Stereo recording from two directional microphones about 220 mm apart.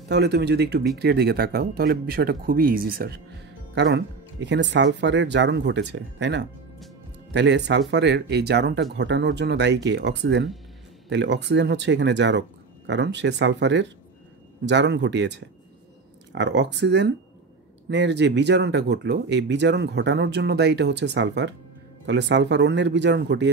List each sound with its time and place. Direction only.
0.1 s speech: 50° right (ahead or behind)